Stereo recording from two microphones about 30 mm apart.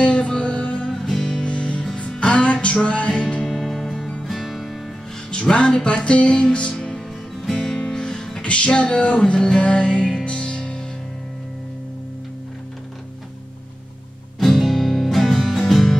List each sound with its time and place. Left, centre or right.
0.0 s music: left
1.0 s music: centre
1.4 s music: left
3.1 s music: left
3.4 s music: centre
5.3 s music: left; by 7.8 s centre
7.8 s music: left
8.1 s music: centre
8.4 s music: left
14.4 s music: centre